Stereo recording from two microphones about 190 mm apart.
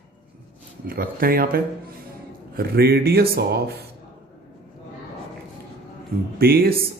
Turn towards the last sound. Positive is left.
turn(degrees=-50)  # may be behind; listen again after turning